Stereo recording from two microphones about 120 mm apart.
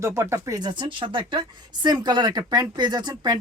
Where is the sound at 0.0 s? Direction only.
25° right (ahead or behind).